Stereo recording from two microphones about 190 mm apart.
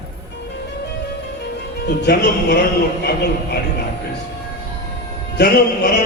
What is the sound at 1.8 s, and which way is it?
Speech, 60° left (ahead or behind).